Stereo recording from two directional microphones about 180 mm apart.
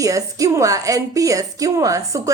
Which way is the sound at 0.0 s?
20° right (ahead or behind).